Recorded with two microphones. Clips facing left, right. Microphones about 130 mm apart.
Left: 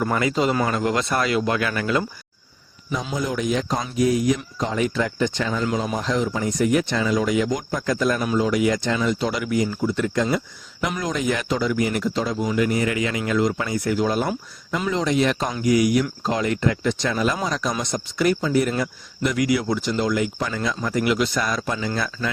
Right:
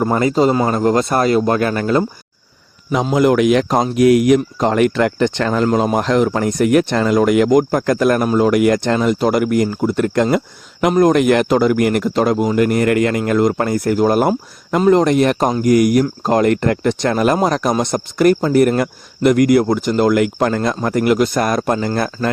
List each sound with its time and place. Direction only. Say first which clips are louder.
0.0 s speech: right 7 dB; 35° right (ahead or behind)
2.9 s a man's voice: right 12 dB; 70° right (ahead or behind); by 22.3 s 50° right (ahead or behind)